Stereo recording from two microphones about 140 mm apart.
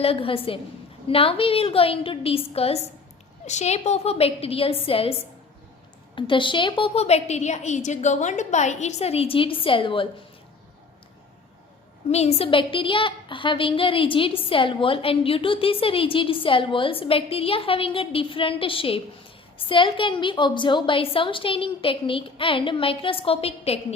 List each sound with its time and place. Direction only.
0.0 s a woman's voice: 40° left (ahead or behind)
6.1 s a woman's voice: 35° left (ahead or behind)
12.1 s a woman's voice: 50° left (ahead or behind)